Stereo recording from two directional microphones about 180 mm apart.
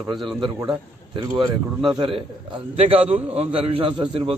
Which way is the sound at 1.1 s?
25° right (ahead or behind).